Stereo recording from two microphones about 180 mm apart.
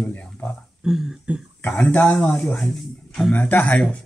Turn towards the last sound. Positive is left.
turn(degrees=10)  # may be behind; listen again after turning